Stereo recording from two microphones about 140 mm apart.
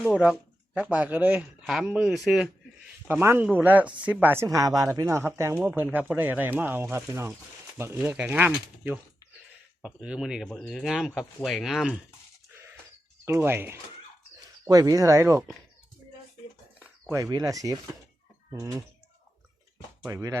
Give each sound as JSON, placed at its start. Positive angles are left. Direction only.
{"t": 0.0, "sound": "speech", "side_deg": -5}
{"t": 3.1, "sound": "speech", "side_deg": -15}
{"t": 13.2, "sound": "speech", "side_deg": -15}
{"t": 16.8, "sound": "speech", "side_deg": -20}
{"t": 20.1, "sound": "speech", "side_deg": -20}